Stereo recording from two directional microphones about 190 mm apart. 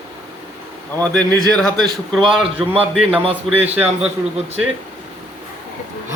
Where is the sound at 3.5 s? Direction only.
10° right (ahead or behind).